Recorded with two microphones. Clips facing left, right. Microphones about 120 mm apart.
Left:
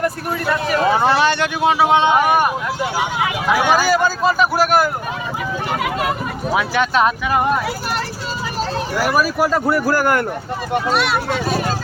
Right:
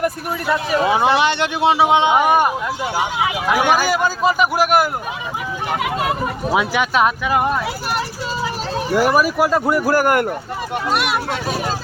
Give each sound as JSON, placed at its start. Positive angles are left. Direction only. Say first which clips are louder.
{"t": 0.0, "sound": "speech", "louder": "left 1 dB", "side_deg": -15}
{"t": 3.7, "sound": "speech", "louder": "left 1 dB", "side_deg": -15}
{"t": 6.5, "sound": "speech", "louder": "left 1 dB", "side_deg": -10}
{"t": 9.0, "sound": "speech", "louder": "right 2 dB", "side_deg": -20}